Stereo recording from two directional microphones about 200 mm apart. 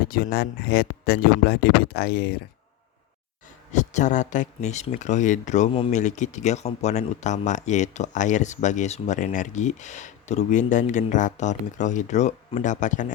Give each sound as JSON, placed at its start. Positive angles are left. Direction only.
{"t": 0.0, "sound": "speech", "side_deg": 45}
{"t": 3.7, "sound": "speech", "side_deg": 35}